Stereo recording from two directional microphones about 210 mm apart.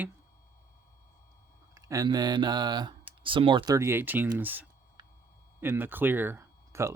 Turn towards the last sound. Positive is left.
turn(degrees=-15)  # may be behind; listen again after turning